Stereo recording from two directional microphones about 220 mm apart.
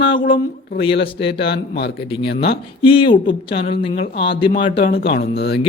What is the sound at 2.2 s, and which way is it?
Speech, 45° left (ahead or behind).